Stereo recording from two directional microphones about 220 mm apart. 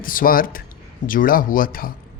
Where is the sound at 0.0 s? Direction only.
40° left (ahead or behind).